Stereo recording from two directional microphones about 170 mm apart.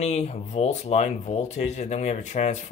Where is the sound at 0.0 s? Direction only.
40° left (ahead or behind).